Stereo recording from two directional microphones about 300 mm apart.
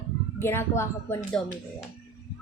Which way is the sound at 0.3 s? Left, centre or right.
Centre.